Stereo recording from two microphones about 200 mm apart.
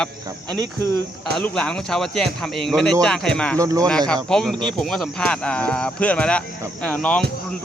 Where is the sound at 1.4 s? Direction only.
5° left (ahead or behind).